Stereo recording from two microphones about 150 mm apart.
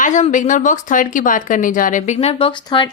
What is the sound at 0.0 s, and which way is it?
Speech, 55° left (ahead or behind).